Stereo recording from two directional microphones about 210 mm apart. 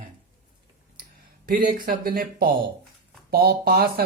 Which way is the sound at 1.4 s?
40° right (ahead or behind).